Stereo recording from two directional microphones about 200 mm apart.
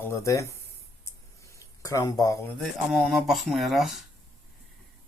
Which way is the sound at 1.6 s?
15° left (ahead or behind).